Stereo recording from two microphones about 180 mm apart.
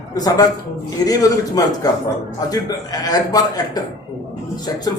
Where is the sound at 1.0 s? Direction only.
20° left (ahead or behind).